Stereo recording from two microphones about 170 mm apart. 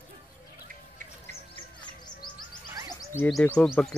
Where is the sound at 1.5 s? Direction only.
25° left (ahead or behind).